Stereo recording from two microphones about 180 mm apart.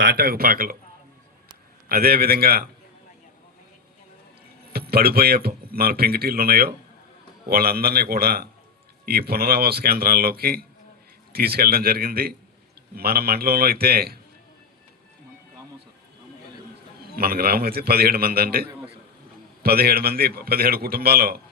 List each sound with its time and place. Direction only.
0.0 s speech: 60° right (ahead or behind)
1.9 s speech: 55° right (ahead or behind)
4.7 s speech: 60° right (ahead or behind)
17.2 s speech: 55° right (ahead or behind)